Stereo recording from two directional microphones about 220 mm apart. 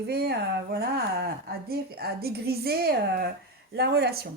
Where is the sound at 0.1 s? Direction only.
50° right (ahead or behind).